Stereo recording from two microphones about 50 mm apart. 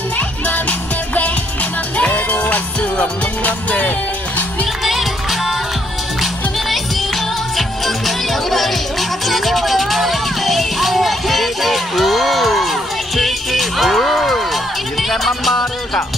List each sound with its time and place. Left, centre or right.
0.5 s music: left
4.8 s music: centre